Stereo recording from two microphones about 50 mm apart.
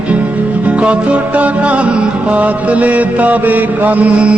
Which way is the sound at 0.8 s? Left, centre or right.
Right.